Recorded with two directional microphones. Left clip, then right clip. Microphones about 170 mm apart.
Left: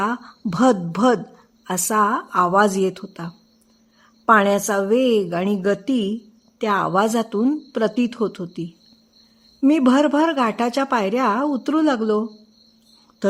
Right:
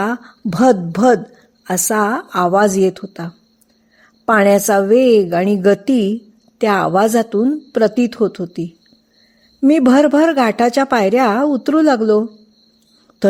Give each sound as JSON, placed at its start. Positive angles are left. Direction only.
{"t": 0.0, "sound": "a woman's voice", "side_deg": -20}
{"t": 9.6, "sound": "speech", "side_deg": -20}